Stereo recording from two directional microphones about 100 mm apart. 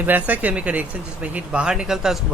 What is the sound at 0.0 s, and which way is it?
Speech, 15° right (ahead or behind).